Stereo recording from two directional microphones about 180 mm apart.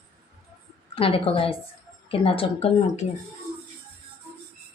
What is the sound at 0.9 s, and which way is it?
Speech, 30° left (ahead or behind).